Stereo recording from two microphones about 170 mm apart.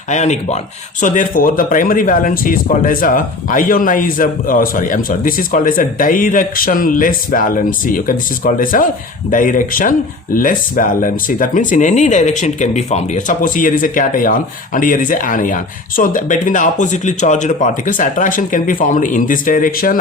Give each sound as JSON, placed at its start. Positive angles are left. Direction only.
{"t": 0.1, "sound": "speech", "side_deg": 40}